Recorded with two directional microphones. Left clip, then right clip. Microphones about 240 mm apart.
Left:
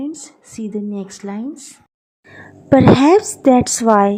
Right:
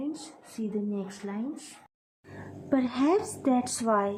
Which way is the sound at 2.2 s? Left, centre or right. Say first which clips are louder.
Left 6 dB; left.